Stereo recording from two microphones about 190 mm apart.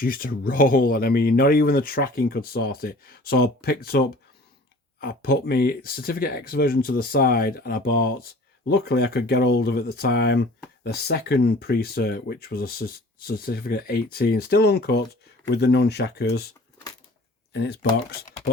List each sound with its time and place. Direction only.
0.0 s speech: 50° left (ahead or behind)
17.5 s speech: 60° left (ahead or behind)